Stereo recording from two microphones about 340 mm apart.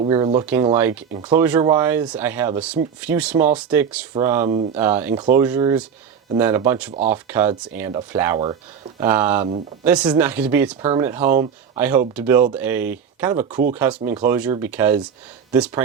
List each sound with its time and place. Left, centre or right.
0.0 s speech: centre
4.4 s speech: centre
4.8 s speech: centre